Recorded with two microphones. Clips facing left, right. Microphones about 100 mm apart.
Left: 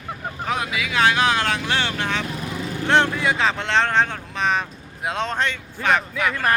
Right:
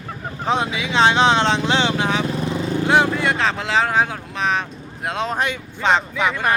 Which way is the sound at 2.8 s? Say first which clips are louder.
Right 1 dB; 5° right (ahead or behind).